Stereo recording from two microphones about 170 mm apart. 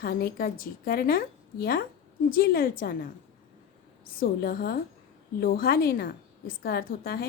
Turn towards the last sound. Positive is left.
turn(degrees=60)  # may be behind; listen again after turning